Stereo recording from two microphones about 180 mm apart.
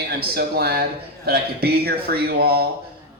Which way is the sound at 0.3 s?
60° right (ahead or behind).